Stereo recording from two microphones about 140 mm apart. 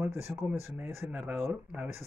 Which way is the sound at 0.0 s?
15° right (ahead or behind).